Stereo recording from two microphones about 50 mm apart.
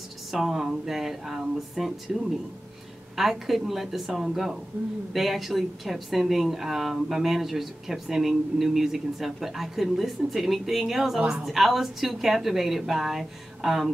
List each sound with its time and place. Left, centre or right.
0.3 s a woman's voice: centre
3.2 s a woman's voice: centre
11.1 s a woman's voice: centre
11.4 s a woman's voice: centre